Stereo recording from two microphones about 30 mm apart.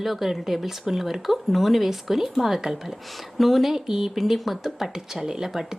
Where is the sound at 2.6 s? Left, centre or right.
Centre.